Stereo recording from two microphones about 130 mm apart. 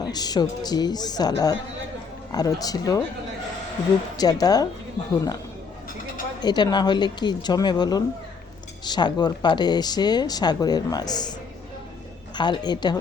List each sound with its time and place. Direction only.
0.0 s speech: 30° left (ahead or behind)
4.2 s speech: 30° left (ahead or behind)
6.4 s speech: 35° left (ahead or behind)
12.4 s speech: 35° left (ahead or behind)